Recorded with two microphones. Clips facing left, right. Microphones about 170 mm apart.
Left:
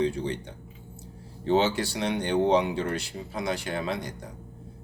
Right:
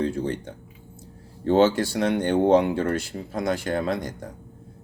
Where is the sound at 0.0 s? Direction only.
50° right (ahead or behind).